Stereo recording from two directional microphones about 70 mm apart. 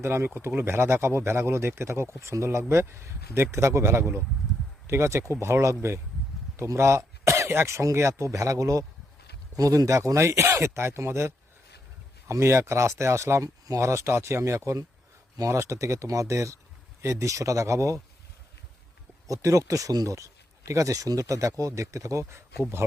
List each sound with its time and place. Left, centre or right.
0.0 s speech: right
19.3 s speech: right
20.1 s speech: right